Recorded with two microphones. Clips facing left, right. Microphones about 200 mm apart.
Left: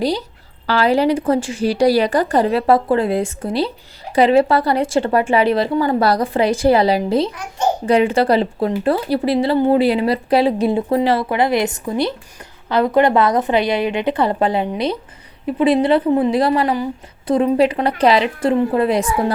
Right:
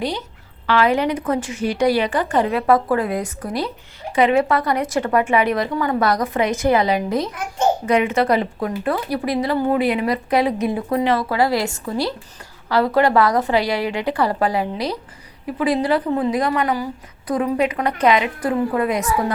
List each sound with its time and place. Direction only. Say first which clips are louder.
0.0 s a woman's voice: left 5 dB; 35° left (ahead or behind)